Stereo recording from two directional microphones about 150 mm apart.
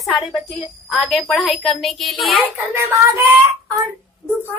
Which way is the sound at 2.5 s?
15° right (ahead or behind).